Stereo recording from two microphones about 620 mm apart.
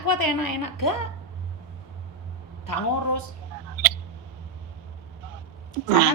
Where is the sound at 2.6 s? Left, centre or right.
Left.